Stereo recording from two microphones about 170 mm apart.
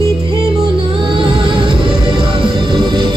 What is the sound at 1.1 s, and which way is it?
Music, 30° right (ahead or behind).